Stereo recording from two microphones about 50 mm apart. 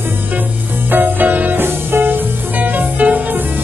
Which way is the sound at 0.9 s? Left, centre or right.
Right.